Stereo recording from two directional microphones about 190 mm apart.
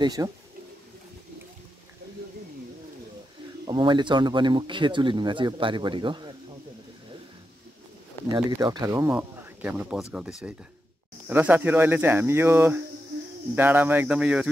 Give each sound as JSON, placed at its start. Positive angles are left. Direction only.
{"t": 0.0, "sound": "speech", "side_deg": -20}
{"t": 3.6, "sound": "speech", "side_deg": -25}
{"t": 8.4, "sound": "speech", "side_deg": -20}